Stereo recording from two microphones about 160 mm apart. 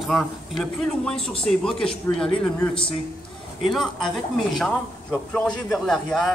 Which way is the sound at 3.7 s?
Centre (ahead or behind).